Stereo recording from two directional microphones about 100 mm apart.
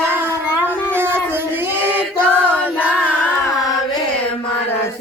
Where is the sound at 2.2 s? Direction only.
10° left (ahead or behind).